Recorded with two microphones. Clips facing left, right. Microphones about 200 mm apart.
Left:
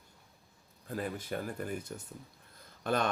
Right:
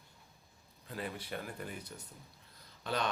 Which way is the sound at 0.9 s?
45° left (ahead or behind).